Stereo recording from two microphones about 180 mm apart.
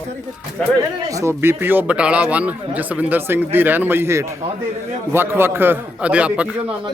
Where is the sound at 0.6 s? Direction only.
5° left (ahead or behind).